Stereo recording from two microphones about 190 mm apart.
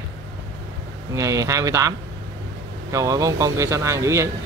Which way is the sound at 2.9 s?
15° right (ahead or behind).